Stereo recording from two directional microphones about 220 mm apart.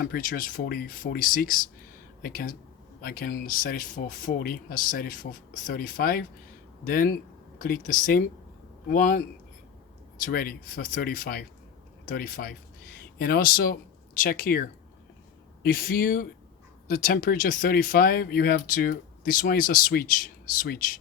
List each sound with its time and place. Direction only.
0.0 s speech: 40° left (ahead or behind)
10.2 s speech: 40° left (ahead or behind)